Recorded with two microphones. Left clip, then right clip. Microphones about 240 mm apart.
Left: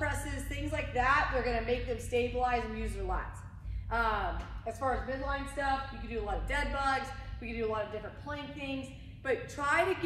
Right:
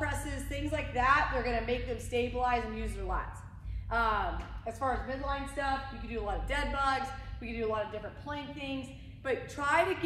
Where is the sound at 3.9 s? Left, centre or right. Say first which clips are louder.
Right 1 dB; centre.